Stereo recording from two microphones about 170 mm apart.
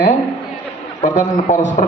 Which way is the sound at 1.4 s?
45° left (ahead or behind).